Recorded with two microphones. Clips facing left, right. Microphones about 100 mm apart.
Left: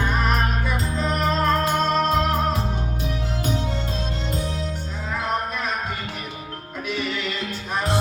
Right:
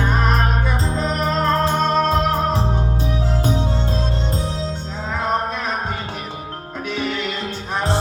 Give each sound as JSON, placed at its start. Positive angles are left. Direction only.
{"t": 0.9, "sound": "music", "side_deg": -30}